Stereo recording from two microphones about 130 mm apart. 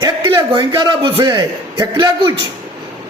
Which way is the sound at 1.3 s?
35° right (ahead or behind).